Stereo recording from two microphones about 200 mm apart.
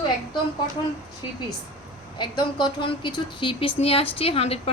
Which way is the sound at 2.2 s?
25° left (ahead or behind).